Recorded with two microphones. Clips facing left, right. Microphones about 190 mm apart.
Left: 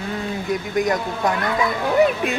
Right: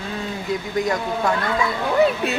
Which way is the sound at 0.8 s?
20° left (ahead or behind).